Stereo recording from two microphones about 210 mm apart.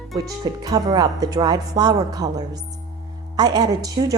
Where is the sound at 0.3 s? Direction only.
15° right (ahead or behind).